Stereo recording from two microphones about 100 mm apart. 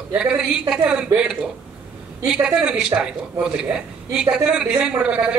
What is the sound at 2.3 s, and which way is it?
A man's voice, 10° right (ahead or behind).